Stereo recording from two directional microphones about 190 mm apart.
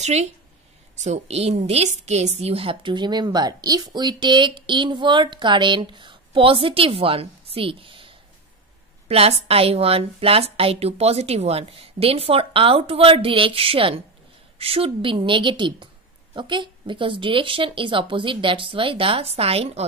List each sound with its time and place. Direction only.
0.0 s a woman's voice: 35° right (ahead or behind)